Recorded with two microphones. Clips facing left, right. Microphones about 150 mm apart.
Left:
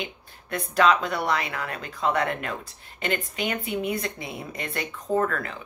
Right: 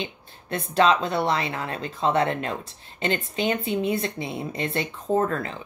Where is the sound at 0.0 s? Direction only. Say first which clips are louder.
Right 2 dB; 25° right (ahead or behind).